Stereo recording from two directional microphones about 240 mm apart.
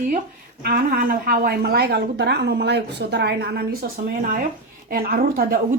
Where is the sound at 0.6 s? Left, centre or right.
Right.